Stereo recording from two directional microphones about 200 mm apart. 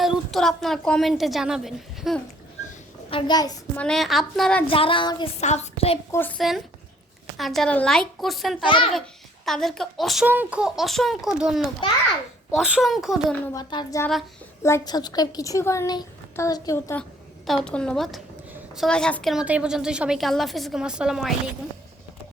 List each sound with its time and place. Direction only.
0.0 s a woman's voice: centre (ahead or behind)
3.1 s speech: 25° left (ahead or behind)
3.8 s a woman's voice: centre (ahead or behind)
4.7 s speech: 25° left (ahead or behind)
5.4 s a woman's voice: 35° left (ahead or behind)
6.1 s a woman's voice: 10° left (ahead or behind)
8.6 s speech: 25° left (ahead or behind)
9.5 s a woman's voice: centre (ahead or behind)
13.5 s a woman's voice: 20° left (ahead or behind); by 21.3 s centre (ahead or behind)